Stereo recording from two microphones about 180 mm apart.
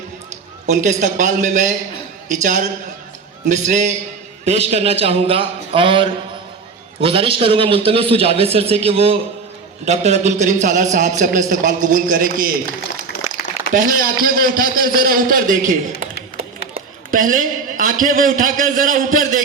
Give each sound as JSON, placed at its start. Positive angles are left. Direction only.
{"t": 0.7, "sound": "a man's voice", "side_deg": -40}
{"t": 13.7, "sound": "a man's voice", "side_deg": -50}